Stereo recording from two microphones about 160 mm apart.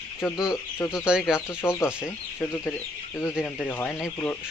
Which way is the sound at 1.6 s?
15° left (ahead or behind).